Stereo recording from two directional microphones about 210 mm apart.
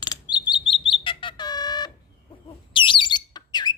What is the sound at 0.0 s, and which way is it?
Bird, 20° left (ahead or behind).